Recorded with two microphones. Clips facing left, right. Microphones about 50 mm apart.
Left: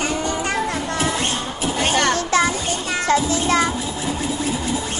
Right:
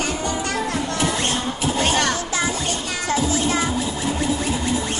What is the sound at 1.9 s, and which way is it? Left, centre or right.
Music, left.